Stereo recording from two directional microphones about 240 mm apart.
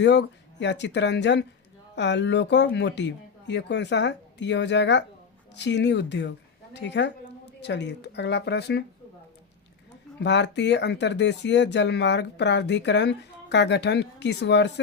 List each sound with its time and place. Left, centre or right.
0.0 s speech: left
10.2 s speech: left